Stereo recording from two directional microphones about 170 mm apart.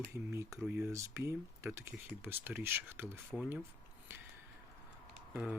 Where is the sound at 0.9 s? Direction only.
15° right (ahead or behind).